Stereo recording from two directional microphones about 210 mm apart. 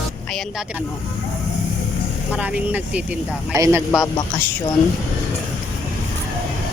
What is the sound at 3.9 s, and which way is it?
Speech, 10° left (ahead or behind).